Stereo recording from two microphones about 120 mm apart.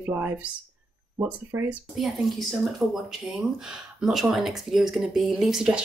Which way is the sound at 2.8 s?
20° right (ahead or behind).